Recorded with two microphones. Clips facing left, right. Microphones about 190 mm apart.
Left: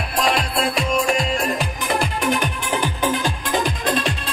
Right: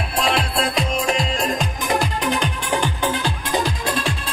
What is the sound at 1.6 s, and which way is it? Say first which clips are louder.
Music: right 1 dB; 60° left (ahead or behind).